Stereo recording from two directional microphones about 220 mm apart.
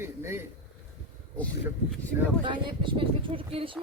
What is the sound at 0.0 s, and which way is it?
Speech, 10° right (ahead or behind).